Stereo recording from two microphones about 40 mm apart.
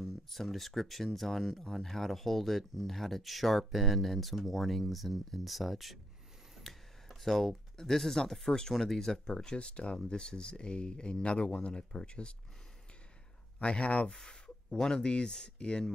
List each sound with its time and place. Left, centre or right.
0.0 s speech: centre; by 12.0 s left
13.6 s speech: left
14.1 s speech: centre